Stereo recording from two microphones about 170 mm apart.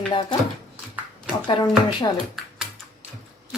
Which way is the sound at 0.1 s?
30° left (ahead or behind).